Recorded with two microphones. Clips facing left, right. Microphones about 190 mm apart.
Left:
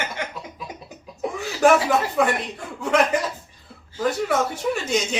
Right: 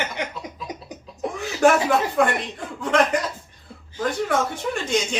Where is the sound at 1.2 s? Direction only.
Centre (ahead or behind).